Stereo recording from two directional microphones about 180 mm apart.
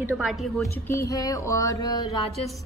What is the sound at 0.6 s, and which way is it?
Speech, 15° left (ahead or behind).